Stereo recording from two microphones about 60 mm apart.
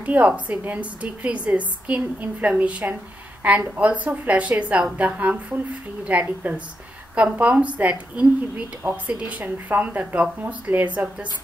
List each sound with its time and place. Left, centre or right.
0.0 s a woman's voice: right